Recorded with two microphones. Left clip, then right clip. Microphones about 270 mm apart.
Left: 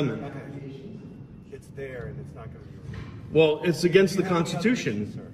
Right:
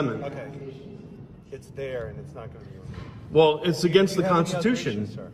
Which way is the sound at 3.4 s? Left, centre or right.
Right.